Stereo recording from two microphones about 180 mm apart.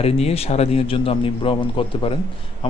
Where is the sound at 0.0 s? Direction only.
35° left (ahead or behind).